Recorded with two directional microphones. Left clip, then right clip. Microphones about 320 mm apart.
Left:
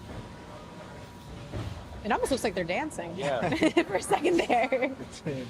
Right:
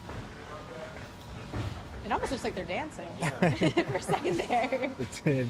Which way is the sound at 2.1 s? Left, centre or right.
Left.